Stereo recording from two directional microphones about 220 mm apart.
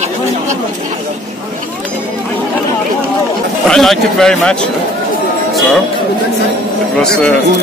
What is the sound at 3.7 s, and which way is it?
Speech, centre (ahead or behind).